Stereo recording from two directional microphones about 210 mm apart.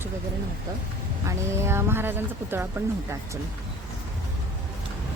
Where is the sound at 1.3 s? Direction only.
10° right (ahead or behind).